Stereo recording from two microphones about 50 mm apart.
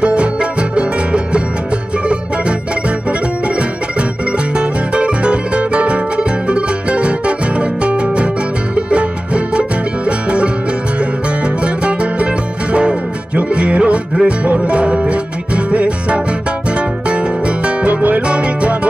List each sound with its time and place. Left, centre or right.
0.0 s music: right
4.6 s music: right